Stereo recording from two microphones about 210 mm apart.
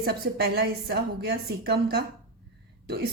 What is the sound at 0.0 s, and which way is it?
A woman's voice, 50° right (ahead or behind).